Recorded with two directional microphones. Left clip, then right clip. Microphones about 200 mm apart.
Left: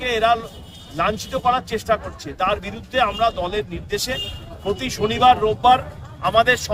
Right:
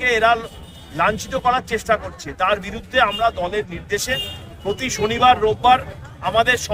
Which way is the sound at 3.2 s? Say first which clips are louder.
Right 1 dB; 15° left (ahead or behind).